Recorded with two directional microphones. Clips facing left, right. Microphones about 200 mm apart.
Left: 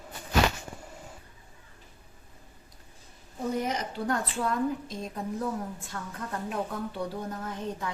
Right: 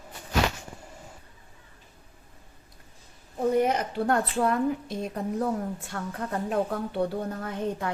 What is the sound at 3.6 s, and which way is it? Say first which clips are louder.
A woman's voice: right 6 dB; 60° right (ahead or behind).